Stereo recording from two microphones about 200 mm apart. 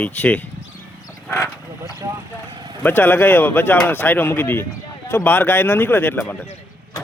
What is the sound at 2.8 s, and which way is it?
Speech, 10° left (ahead or behind).